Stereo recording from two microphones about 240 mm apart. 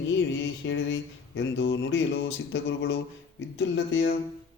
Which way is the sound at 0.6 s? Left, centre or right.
Left.